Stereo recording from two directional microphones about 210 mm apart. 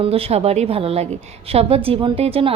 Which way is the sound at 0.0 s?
30° right (ahead or behind).